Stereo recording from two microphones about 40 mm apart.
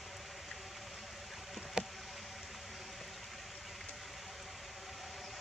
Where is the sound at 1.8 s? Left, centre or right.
Centre.